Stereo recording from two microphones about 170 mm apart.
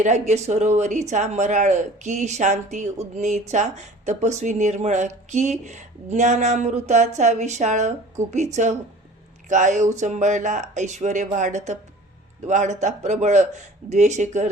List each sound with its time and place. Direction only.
0.0 s speech: 40° right (ahead or behind)